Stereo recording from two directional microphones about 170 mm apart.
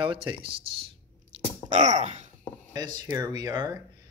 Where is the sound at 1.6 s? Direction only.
45° right (ahead or behind).